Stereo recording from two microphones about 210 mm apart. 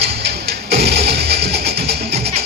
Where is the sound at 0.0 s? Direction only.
50° right (ahead or behind).